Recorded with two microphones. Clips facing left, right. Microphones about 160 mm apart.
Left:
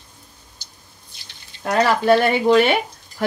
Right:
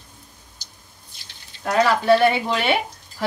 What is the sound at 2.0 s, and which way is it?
Speech, 45° left (ahead or behind).